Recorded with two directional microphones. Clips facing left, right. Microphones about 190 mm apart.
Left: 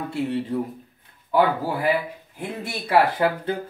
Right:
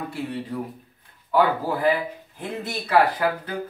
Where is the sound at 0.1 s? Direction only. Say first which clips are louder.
Left 5 dB; 25° left (ahead or behind).